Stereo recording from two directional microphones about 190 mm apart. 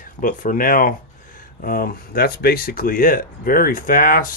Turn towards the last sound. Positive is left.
turn(degrees=45)  # may be behind; listen again after turning